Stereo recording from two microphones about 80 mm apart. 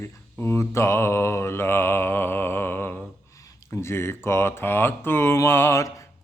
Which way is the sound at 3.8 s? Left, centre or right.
Left.